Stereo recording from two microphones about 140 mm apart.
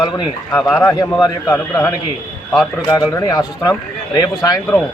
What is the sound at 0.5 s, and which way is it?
Speech, 20° left (ahead or behind).